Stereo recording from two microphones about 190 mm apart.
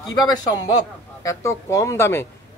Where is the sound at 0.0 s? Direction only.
20° left (ahead or behind).